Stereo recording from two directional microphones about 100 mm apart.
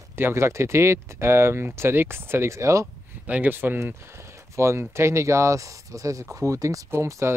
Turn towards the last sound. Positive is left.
turn(degrees=-25)  # may be behind; listen again after turning